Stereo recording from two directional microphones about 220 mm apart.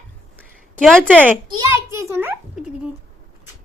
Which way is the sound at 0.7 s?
Centre (ahead or behind).